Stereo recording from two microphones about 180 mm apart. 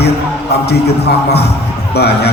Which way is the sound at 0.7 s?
65° left (ahead or behind).